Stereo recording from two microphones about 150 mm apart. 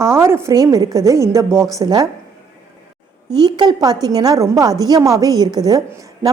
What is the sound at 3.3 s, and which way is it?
A woman's voice, 30° right (ahead or behind).